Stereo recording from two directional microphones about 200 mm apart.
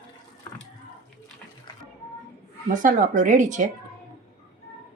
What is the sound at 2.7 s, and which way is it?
Speech, 40° right (ahead or behind).